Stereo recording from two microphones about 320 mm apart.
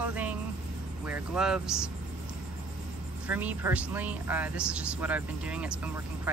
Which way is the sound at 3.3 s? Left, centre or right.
Centre.